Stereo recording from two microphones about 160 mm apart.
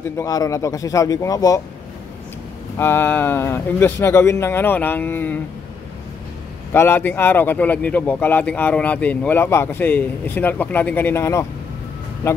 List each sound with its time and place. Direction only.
0.2 s speech: 20° left (ahead or behind)
2.8 s a man's voice: 10° left (ahead or behind)
6.7 s a man's voice: 15° left (ahead or behind)